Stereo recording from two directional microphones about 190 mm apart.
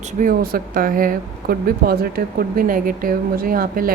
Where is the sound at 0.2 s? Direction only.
50° right (ahead or behind).